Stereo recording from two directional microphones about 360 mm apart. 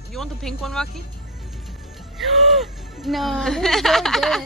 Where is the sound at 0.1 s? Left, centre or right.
Centre.